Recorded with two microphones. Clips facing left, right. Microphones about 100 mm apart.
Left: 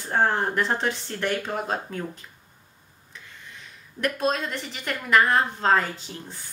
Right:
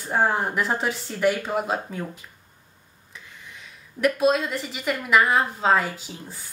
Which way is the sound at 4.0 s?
5° right (ahead or behind).